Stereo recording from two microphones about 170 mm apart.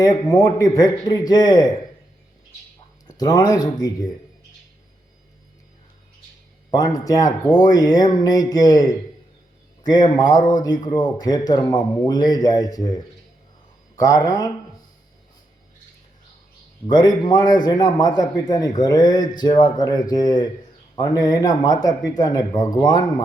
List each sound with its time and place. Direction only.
0.0 s a man's voice: 20° left (ahead or behind)
3.1 s a man's voice: 20° left (ahead or behind)
6.7 s a man's voice: 20° left (ahead or behind)
16.8 s a man's voice: 25° left (ahead or behind)